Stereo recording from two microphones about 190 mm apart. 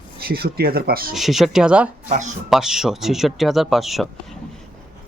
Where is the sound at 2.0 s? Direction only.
40° right (ahead or behind).